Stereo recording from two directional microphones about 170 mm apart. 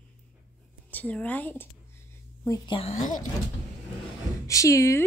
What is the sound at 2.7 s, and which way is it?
Speech, 35° left (ahead or behind).